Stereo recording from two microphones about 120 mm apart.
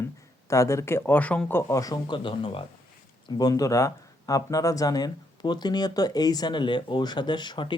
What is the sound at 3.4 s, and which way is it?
Speech, 30° left (ahead or behind).